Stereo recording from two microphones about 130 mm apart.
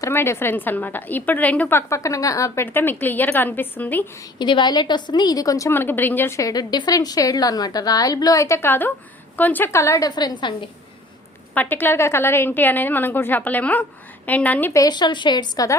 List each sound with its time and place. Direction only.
0.0 s a woman's voice: 20° left (ahead or behind)
1.9 s a woman's voice: 25° left (ahead or behind)
4.4 s a woman's voice: 35° left (ahead or behind)
11.5 s a woman's voice: 15° left (ahead or behind)
14.7 s a woman's voice: 30° left (ahead or behind)